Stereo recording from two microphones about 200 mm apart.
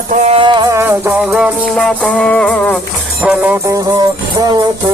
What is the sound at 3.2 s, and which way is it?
Music, 5° right (ahead or behind).